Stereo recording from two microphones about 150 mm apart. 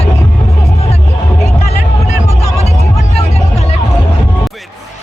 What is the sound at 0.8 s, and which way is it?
Music, 45° left (ahead or behind).